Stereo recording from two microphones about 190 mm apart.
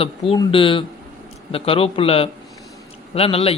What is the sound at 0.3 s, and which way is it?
Speech, 25° left (ahead or behind).